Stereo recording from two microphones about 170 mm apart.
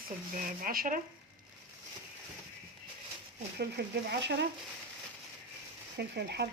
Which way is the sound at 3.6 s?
75° right (ahead or behind).